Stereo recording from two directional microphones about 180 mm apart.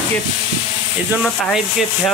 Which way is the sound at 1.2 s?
Centre (ahead or behind).